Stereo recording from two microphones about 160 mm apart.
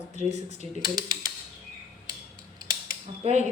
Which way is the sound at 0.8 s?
25° right (ahead or behind).